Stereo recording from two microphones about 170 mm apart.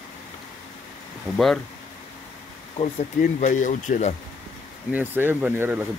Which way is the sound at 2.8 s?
45° left (ahead or behind).